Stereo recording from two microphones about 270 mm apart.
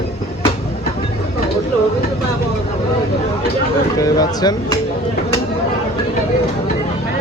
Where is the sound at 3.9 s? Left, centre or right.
Centre.